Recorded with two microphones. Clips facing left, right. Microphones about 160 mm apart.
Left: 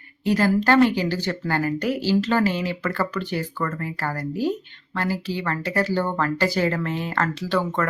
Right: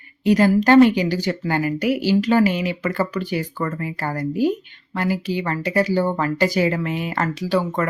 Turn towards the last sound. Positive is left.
turn(degrees=-10)  # may be behind; listen again after turning